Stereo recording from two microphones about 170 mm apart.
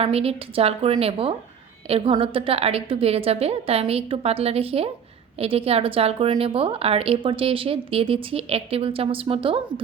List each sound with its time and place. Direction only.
0.0 s a woman's voice: 35° right (ahead or behind)